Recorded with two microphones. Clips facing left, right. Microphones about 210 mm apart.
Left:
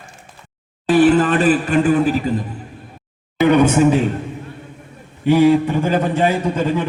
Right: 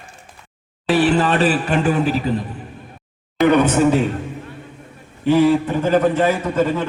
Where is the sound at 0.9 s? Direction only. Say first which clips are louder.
Left 3 dB; 50° left (ahead or behind).